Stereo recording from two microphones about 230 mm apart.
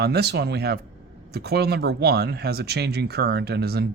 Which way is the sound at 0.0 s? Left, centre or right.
Right.